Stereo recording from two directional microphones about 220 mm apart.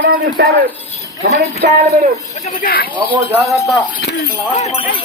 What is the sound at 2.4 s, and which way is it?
Speech, 35° left (ahead or behind).